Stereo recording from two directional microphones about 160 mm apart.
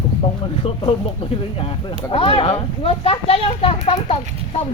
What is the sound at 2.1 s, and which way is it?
Speech, 35° left (ahead or behind).